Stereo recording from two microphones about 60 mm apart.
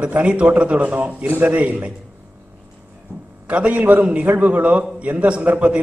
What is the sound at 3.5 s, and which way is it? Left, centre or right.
A man's voice, right.